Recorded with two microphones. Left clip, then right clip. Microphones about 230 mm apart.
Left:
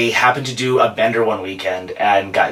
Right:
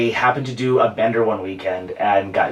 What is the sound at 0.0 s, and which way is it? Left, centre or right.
Speech, centre.